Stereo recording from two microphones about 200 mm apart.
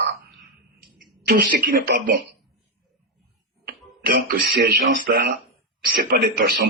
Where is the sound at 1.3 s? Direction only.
45° right (ahead or behind).